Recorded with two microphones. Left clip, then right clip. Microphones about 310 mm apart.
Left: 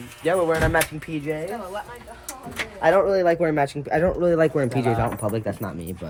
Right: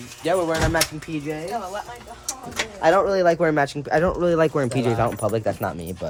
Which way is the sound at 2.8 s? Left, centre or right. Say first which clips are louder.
Even; centre.